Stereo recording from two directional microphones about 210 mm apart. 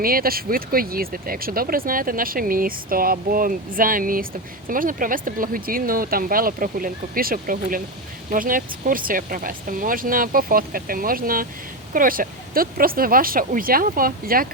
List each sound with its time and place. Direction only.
0.0 s speech: 45° right (ahead or behind)